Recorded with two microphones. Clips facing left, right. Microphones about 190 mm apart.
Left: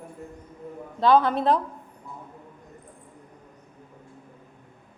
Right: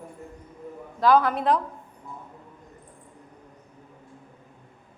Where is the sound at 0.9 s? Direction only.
25° left (ahead or behind).